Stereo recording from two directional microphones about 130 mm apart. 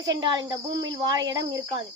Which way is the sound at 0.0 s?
35° right (ahead or behind).